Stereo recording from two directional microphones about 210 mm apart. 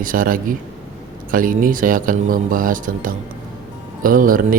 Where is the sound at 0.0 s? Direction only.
40° right (ahead or behind).